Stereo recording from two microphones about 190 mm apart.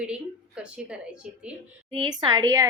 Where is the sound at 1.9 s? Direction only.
25° right (ahead or behind).